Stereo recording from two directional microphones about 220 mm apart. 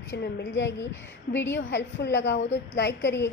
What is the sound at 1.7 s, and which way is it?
A woman's voice, 50° left (ahead or behind).